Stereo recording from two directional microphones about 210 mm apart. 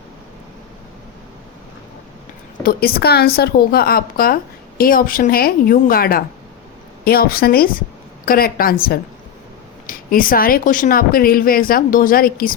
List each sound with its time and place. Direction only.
2.6 s speech: 45° left (ahead or behind)